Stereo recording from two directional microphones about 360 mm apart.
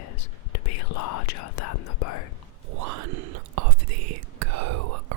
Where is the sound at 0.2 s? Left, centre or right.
Left.